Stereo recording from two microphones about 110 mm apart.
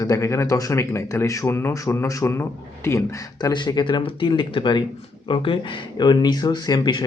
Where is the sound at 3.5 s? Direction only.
45° left (ahead or behind).